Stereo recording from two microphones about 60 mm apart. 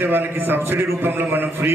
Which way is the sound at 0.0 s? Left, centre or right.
Right.